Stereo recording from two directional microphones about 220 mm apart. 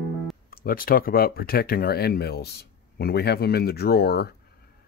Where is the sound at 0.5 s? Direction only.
40° left (ahead or behind).